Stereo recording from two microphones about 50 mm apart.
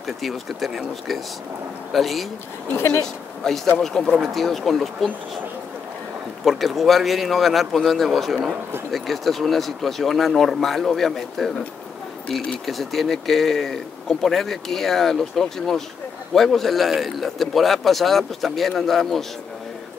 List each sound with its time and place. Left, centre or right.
0.0 s a man's voice: centre
1.9 s a man's voice: centre
3.4 s a man's voice: centre
6.4 s a man's voice: centre
12.6 s a man's voice: centre